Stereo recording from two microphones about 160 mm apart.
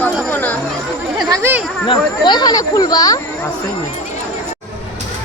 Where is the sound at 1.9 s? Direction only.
25° left (ahead or behind).